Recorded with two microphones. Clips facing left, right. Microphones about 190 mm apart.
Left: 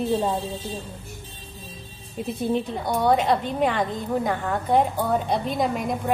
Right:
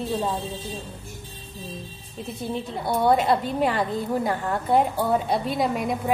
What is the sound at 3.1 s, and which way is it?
A woman's voice, 5° right (ahead or behind).